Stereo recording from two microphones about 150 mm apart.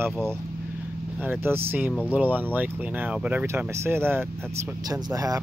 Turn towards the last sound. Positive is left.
turn(degrees=-20)  # may be behind; listen again after turning